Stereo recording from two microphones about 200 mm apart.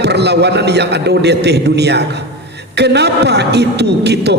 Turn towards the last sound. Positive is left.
turn(degrees=-55)  # may be behind; listen again after turning